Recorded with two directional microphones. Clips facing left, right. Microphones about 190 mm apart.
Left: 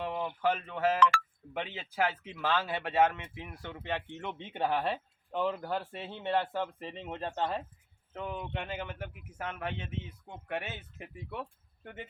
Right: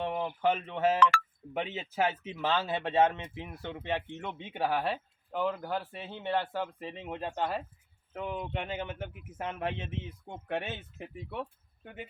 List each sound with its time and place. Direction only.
0.1 s a sound: 10° right (ahead or behind)
0.4 s speech: 25° right (ahead or behind)
1.1 s telephone dialing: 55° right (ahead or behind)
1.5 s speech: 25° right (ahead or behind)
11.3 s speech: 10° right (ahead or behind)